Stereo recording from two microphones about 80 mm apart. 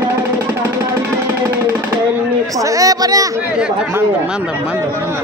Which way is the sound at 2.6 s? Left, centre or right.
Right.